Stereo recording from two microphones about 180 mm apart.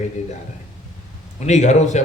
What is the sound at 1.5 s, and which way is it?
Speech, 40° left (ahead or behind).